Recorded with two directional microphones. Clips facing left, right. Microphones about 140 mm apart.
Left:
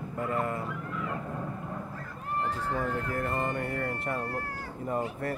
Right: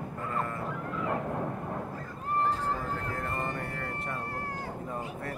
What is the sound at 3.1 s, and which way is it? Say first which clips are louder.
Music: left 4 dB; 5° left (ahead or behind).